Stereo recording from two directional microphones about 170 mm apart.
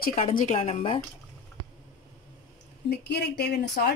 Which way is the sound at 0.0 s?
55° left (ahead or behind).